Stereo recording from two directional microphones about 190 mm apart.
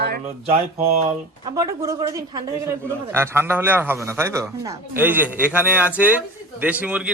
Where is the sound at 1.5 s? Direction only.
15° right (ahead or behind).